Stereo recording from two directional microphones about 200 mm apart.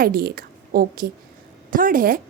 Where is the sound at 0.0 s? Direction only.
45° right (ahead or behind).